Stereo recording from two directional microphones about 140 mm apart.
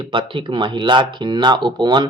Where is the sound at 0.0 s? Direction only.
35° right (ahead or behind).